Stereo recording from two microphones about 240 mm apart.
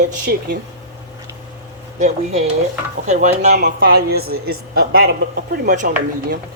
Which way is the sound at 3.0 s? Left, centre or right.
Right.